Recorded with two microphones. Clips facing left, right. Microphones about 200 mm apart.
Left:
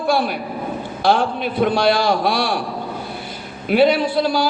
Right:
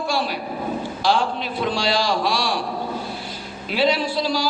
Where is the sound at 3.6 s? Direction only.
55° left (ahead or behind).